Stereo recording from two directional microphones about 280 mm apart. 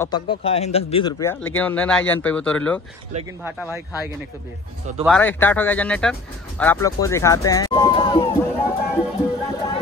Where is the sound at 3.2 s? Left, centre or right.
Centre.